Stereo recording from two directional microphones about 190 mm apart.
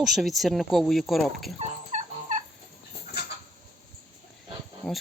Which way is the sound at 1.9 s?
40° right (ahead or behind).